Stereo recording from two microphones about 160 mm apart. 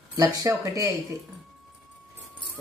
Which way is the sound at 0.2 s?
20° right (ahead or behind).